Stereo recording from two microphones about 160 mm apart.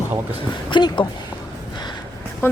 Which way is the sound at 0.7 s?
25° left (ahead or behind).